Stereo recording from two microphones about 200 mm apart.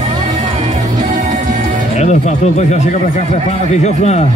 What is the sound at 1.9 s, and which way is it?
Speech, 35° left (ahead or behind).